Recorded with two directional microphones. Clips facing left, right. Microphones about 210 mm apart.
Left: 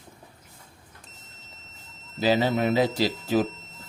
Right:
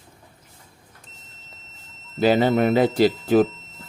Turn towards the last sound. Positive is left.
turn(degrees=-55)  # may be behind; listen again after turning